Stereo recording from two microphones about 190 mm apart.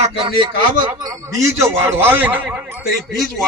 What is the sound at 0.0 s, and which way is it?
A man's voice, 30° right (ahead or behind).